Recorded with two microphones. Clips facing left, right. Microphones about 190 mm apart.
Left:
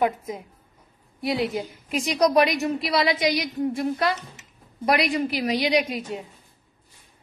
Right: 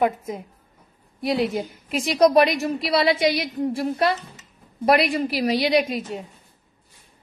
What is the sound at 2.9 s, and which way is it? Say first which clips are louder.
A woman's voice: right 4 dB; 30° right (ahead or behind).